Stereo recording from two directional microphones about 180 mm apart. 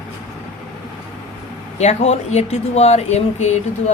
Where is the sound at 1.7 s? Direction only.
40° left (ahead or behind).